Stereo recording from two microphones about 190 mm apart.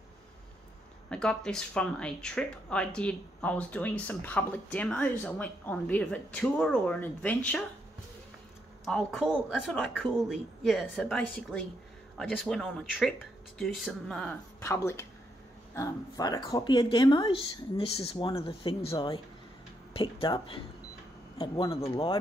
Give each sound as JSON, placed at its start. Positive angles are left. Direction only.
{"t": 1.1, "sound": "speech", "side_deg": 5}
{"t": 8.8, "sound": "speech", "side_deg": 0}